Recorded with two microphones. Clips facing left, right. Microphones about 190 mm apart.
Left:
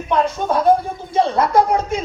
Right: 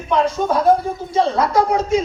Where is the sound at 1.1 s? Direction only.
55° left (ahead or behind).